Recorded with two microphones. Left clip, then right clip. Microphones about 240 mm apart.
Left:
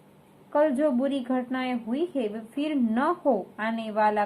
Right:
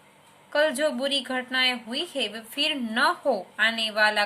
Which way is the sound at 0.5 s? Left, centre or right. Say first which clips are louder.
Even; right.